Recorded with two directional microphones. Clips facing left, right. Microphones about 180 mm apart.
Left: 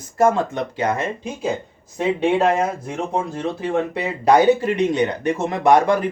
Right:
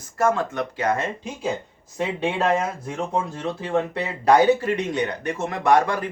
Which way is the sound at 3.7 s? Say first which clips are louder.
Left 2 dB; 15° left (ahead or behind).